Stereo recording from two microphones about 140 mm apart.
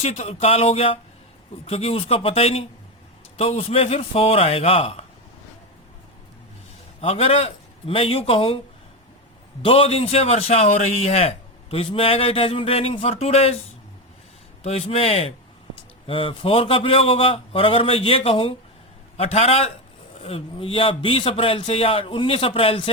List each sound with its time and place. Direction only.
0.0 s a man's voice: 50° left (ahead or behind)
7.0 s a man's voice: 45° left (ahead or behind)
9.6 s a man's voice: 40° left (ahead or behind)
14.6 s a man's voice: 50° left (ahead or behind)